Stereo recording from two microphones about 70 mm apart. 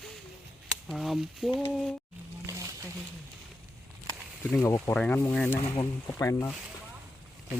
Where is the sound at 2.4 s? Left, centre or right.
Right.